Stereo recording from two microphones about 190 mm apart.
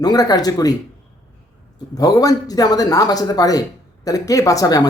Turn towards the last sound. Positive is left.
turn(degrees=20)  # may be behind; listen again after turning